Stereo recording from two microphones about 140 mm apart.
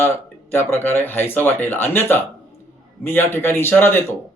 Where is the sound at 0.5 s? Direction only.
15° left (ahead or behind).